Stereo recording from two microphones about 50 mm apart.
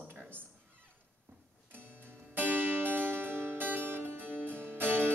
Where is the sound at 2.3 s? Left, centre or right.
Right.